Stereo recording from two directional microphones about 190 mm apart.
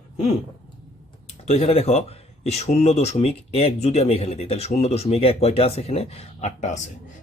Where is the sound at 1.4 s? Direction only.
35° left (ahead or behind).